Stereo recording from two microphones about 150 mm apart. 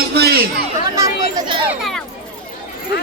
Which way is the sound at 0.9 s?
20° right (ahead or behind).